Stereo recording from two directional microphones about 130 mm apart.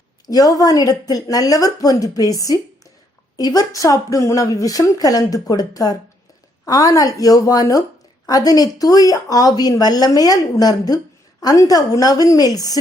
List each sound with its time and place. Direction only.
0.3 s speech: 30° left (ahead or behind)